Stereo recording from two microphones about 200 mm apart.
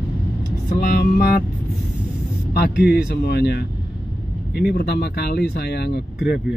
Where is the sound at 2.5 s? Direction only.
55° left (ahead or behind).